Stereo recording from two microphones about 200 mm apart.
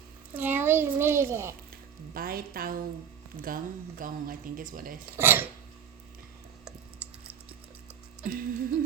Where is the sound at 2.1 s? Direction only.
45° right (ahead or behind).